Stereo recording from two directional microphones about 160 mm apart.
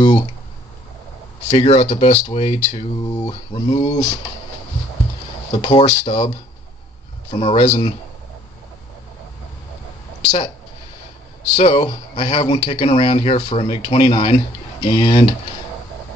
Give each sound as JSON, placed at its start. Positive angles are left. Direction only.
{"t": 1.5, "sound": "speech", "side_deg": 40}
{"t": 5.6, "sound": "speech", "side_deg": 35}
{"t": 11.5, "sound": "speech", "side_deg": 35}